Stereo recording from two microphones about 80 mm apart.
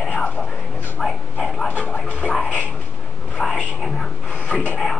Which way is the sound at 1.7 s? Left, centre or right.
Centre.